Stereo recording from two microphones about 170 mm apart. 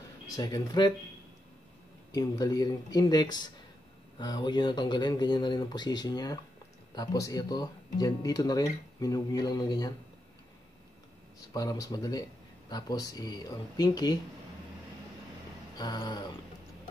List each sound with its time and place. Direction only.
0.4 s speech: 25° left (ahead or behind)
2.1 s speech: 25° left (ahead or behind)
11.5 s speech: 20° left (ahead or behind)
15.8 s speech: 25° left (ahead or behind)